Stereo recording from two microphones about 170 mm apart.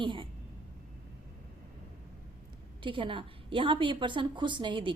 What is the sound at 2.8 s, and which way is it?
A woman's voice, 30° right (ahead or behind).